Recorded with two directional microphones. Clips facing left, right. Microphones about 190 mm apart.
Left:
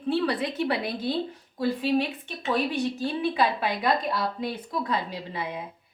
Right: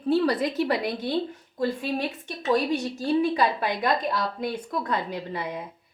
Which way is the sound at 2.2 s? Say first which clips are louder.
Right 3 dB; 40° right (ahead or behind).